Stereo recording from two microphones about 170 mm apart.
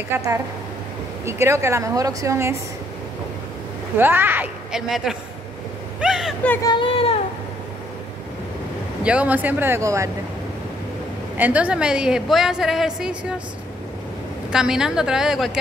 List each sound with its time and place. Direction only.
0.1 s a woman's voice: 15° right (ahead or behind)
4.0 s a woman's voice: 10° right (ahead or behind)
4.8 s a woman's voice: centre (ahead or behind)
6.6 s speech: 30° left (ahead or behind)
9.0 s a woman's voice: 10° right (ahead or behind)
11.3 s a woman's voice: 10° right (ahead or behind)
14.5 s a woman's voice: 5° right (ahead or behind)